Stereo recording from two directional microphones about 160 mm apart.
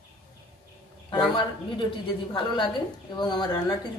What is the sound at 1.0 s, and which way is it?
A man's voice, 30° left (ahead or behind).